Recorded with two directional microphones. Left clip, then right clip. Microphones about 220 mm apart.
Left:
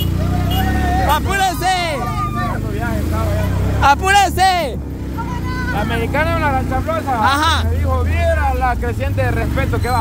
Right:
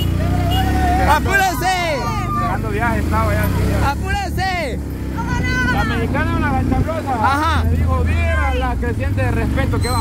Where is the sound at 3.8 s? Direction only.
35° left (ahead or behind).